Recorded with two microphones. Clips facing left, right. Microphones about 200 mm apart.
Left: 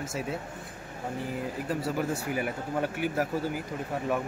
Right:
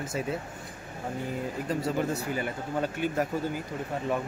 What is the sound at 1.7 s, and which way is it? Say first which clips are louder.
Speech: right 1 dB; 5° left (ahead or behind).